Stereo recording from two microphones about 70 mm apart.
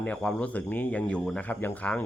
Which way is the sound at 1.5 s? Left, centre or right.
Left.